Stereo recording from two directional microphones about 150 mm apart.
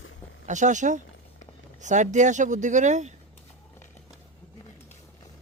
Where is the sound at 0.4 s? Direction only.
55° right (ahead or behind).